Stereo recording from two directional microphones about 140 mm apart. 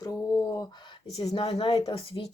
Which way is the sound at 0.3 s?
25° left (ahead or behind).